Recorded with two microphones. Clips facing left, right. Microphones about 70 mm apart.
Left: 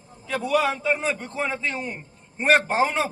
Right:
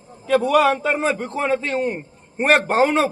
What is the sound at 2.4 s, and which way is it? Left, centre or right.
Speech, right.